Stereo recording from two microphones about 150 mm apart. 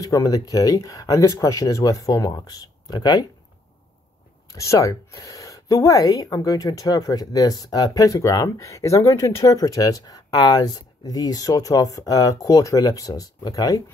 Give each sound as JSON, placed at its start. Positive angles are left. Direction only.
{"t": 0.0, "sound": "speech", "side_deg": 25}
{"t": 4.5, "sound": "speech", "side_deg": 20}